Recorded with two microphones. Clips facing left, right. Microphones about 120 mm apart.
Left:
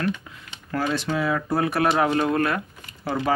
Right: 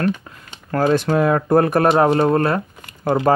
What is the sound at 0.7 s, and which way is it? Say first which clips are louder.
Speech: right 8 dB; 50° right (ahead or behind).